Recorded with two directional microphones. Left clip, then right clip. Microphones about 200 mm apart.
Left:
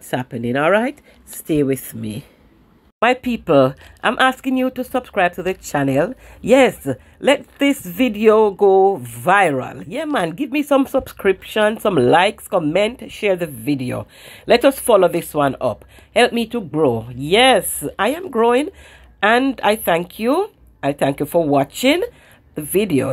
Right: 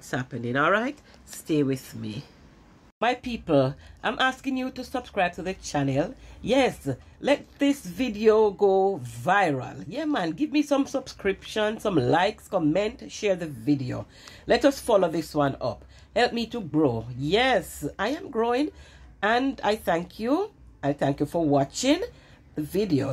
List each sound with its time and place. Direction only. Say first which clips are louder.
0.1 s speech: left 8 dB; 30° left (ahead or behind)